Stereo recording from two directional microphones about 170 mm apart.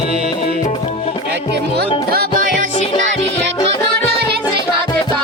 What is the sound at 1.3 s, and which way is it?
Speech, 75° right (ahead or behind).